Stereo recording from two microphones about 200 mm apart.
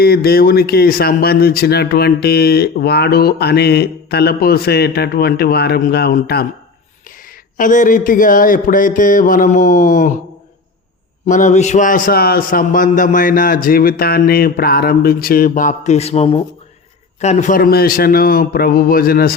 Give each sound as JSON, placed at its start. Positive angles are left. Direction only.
{"t": 0.0, "sound": "speech", "side_deg": 50}
{"t": 7.5, "sound": "mantra", "side_deg": 40}
{"t": 11.3, "sound": "speech", "side_deg": 40}